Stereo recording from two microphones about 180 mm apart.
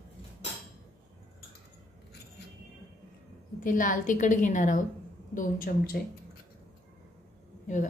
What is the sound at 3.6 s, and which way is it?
A woman's voice, 50° left (ahead or behind).